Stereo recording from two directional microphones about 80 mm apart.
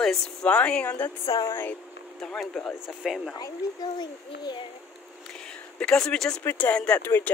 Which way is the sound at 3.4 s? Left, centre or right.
Left.